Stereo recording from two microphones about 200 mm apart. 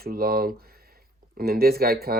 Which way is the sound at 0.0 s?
50° right (ahead or behind).